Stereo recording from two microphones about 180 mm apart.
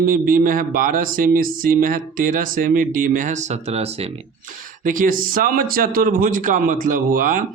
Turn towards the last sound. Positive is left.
turn(degrees=-50)  # may be behind; listen again after turning